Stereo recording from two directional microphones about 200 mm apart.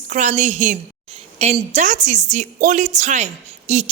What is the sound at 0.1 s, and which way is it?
A woman's voice, 35° right (ahead or behind).